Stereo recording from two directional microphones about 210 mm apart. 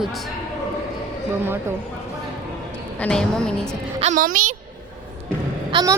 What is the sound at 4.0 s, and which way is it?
Speech, 35° right (ahead or behind).